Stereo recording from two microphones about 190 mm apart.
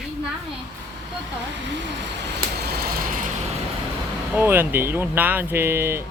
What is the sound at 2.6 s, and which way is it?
Vehicle, 50° right (ahead or behind).